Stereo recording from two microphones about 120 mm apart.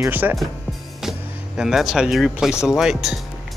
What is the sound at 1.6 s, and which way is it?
Speech, 5° right (ahead or behind).